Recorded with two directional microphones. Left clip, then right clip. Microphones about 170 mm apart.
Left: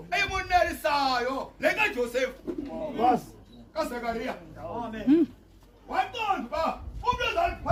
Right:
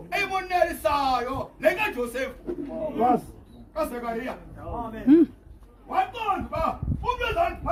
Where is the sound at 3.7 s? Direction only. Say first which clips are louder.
Right 2 dB; 5° left (ahead or behind).